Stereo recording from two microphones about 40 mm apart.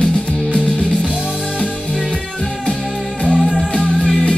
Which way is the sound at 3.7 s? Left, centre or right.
Left.